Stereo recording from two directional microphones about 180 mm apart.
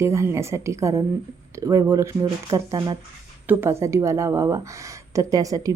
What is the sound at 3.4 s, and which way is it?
A woman's voice, 10° right (ahead or behind).